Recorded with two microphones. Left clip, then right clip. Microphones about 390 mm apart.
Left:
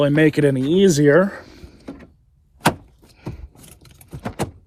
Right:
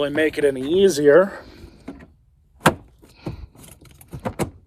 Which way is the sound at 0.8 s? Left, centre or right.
Centre.